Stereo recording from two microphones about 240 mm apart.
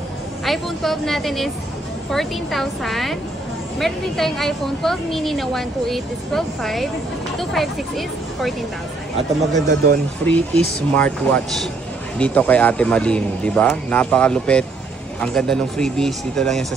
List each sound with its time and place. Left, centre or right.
0.5 s a woman's voice: centre
9.5 s speech: right
10.2 s a woman's voice: centre